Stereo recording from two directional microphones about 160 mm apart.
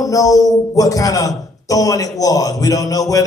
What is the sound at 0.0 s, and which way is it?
A man's voice, 20° left (ahead or behind).